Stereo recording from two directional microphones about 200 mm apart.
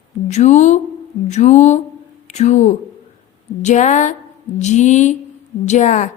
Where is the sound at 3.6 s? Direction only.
35° left (ahead or behind).